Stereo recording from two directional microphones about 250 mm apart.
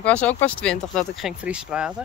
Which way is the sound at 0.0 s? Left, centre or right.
Centre.